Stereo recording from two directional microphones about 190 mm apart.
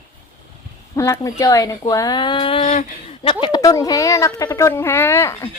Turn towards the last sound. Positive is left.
turn(degrees=15)  # may be behind; listen again after turning